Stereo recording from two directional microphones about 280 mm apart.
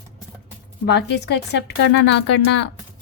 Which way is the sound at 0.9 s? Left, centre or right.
Left.